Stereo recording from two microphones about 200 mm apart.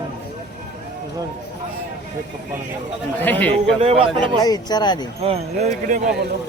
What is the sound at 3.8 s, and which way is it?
Speech, 25° right (ahead or behind).